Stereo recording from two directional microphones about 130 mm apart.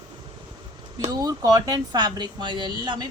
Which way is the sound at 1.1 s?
25° right (ahead or behind).